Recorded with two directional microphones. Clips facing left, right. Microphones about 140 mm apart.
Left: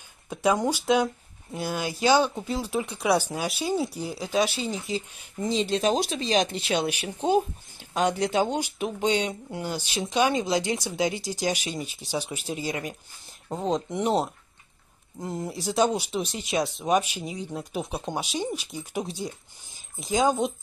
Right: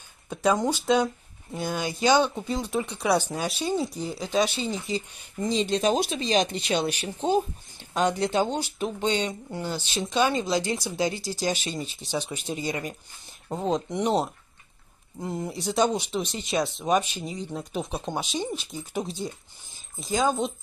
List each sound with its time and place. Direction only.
0.3 s speech: 5° left (ahead or behind); by 11.4 s 20° left (ahead or behind)
11.4 s speech: 10° left (ahead or behind)